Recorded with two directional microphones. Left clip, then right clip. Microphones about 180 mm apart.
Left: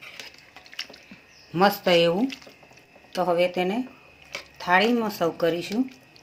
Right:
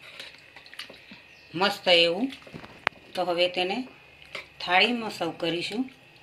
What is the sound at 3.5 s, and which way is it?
Speech, 45° left (ahead or behind).